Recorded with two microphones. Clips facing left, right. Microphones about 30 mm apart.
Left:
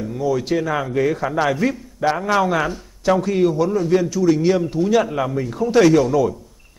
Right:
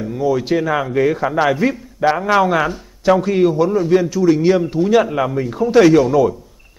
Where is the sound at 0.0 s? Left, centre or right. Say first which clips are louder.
Right 3 dB; centre.